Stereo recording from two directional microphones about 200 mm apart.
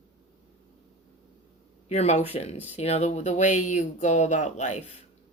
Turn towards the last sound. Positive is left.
turn(degrees=35)  # may be behind; listen again after turning